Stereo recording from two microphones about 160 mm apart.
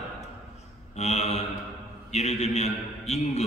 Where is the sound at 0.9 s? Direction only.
45° left (ahead or behind).